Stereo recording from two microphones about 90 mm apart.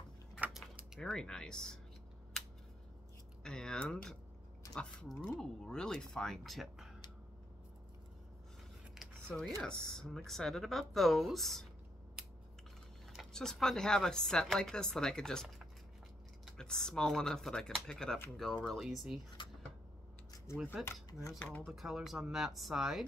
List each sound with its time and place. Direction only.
0.9 s speech: 5° left (ahead or behind)
3.4 s speech: 10° left (ahead or behind)
8.9 s a sound: centre (ahead or behind)
9.6 s speech: 5° left (ahead or behind)
13.2 s speech: 5° left (ahead or behind)
16.5 s speech: 5° left (ahead or behind)
19.4 s a sound: 65° left (ahead or behind)
20.5 s speech: 15° right (ahead or behind)
21.3 s speech: 5° left (ahead or behind)